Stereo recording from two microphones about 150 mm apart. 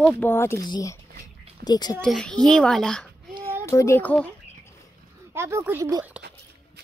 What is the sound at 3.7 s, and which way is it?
Speech, 20° left (ahead or behind).